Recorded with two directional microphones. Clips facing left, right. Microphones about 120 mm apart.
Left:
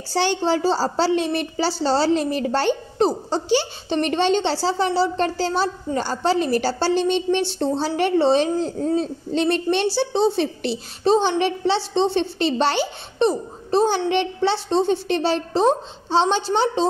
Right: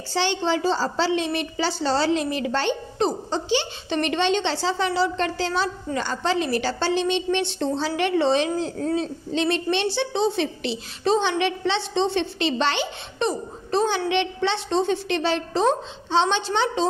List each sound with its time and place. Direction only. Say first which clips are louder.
0.1 s speech: left 3 dB; 45° left (ahead or behind)
1.8 s a woman's voice: left 3 dB; 30° left (ahead or behind)